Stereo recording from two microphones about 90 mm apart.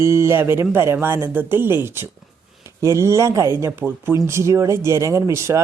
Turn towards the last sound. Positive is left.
turn(degrees=-35)  # may be behind; listen again after turning